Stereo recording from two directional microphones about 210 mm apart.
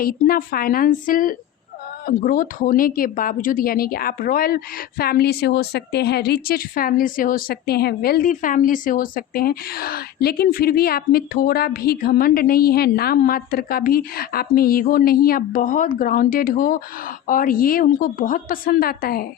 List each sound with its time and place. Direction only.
0.0 s a woman's voice: 45° left (ahead or behind)